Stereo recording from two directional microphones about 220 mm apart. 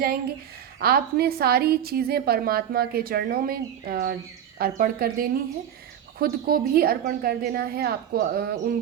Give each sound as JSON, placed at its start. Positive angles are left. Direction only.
{"t": 0.8, "sound": "a woman's voice", "side_deg": -45}